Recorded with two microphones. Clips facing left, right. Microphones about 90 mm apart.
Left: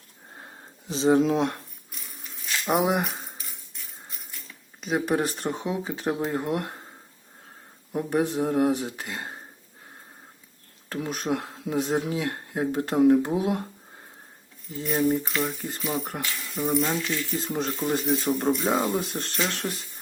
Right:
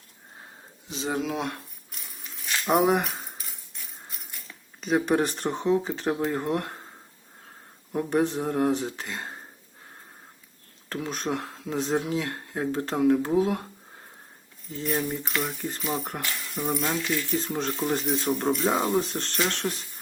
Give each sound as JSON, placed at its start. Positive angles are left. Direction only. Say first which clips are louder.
{"t": 0.9, "sound": "speech", "louder": "left 9 dB", "side_deg": 30}
{"t": 2.6, "sound": "speech", "louder": "right 2 dB", "side_deg": 5}
{"t": 4.8, "sound": "speech", "louder": "right 2 dB", "side_deg": 0}
{"t": 7.9, "sound": "speech", "louder": "even", "side_deg": 5}
{"t": 10.9, "sound": "speech", "louder": "left 2 dB", "side_deg": 10}
{"t": 14.8, "sound": "speech", "louder": "left 5 dB", "side_deg": 5}
{"t": 19.6, "sound": "speech", "louder": "right 1 dB", "side_deg": -15}